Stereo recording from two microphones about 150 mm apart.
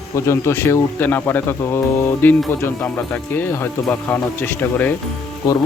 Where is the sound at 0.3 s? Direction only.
15° left (ahead or behind).